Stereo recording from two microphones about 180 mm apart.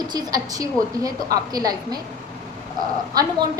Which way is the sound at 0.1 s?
20° right (ahead or behind).